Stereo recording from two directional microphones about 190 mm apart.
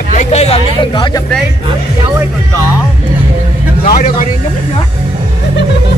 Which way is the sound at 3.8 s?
50° left (ahead or behind).